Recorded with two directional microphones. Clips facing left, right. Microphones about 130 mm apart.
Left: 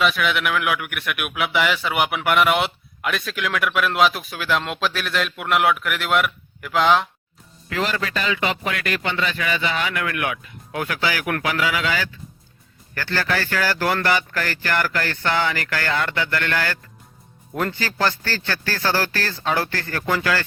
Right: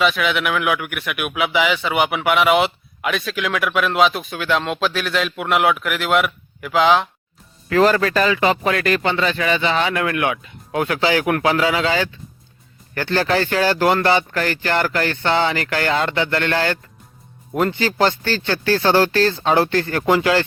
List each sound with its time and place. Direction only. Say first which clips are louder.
0.0 s a man's voice: right 2 dB; centre (ahead or behind)
7.7 s a man's voice: right 9 dB; 45° right (ahead or behind); by 20.4 s 20° right (ahead or behind)